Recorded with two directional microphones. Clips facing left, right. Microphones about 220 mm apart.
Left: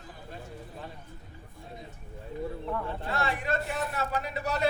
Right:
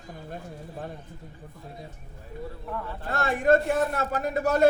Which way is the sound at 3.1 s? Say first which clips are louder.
Right 10 dB; 45° right (ahead or behind).